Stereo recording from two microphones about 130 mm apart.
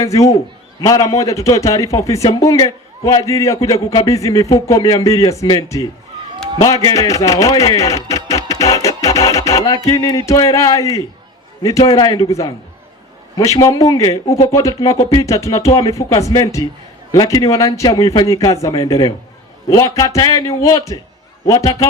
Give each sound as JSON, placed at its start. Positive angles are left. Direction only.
{"t": 0.0, "sound": "a man's voice", "side_deg": 25}